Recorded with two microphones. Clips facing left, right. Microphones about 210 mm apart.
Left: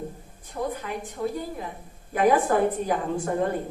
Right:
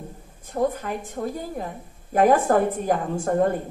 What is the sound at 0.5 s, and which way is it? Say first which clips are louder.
A man's voice: right 6 dB; 45° right (ahead or behind).